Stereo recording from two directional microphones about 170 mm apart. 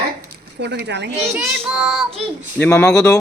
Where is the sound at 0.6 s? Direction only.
80° right.